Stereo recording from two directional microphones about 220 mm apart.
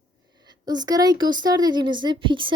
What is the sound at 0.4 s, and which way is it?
Speech, 20° right (ahead or behind).